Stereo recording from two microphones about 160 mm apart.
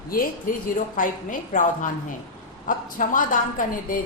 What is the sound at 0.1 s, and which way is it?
A woman's voice, 65° left (ahead or behind).